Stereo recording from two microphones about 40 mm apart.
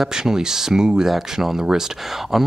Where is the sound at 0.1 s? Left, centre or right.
Centre.